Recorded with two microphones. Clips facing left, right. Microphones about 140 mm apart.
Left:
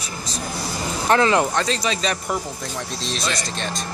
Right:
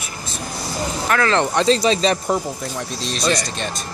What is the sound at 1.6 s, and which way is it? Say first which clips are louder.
Speech: right 7 dB; 30° right (ahead or behind).